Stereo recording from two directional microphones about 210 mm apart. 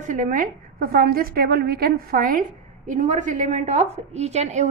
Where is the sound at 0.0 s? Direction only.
40° right (ahead or behind).